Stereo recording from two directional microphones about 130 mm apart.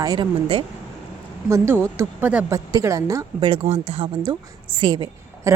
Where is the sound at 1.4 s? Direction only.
20° right (ahead or behind).